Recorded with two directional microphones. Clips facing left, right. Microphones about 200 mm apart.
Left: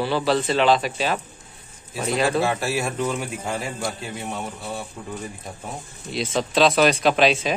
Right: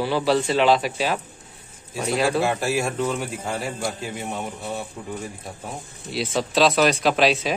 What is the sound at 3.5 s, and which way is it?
Speech, 5° right (ahead or behind).